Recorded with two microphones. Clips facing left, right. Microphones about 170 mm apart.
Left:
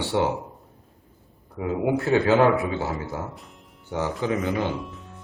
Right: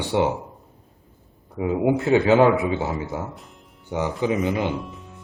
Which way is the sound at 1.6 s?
20° right (ahead or behind).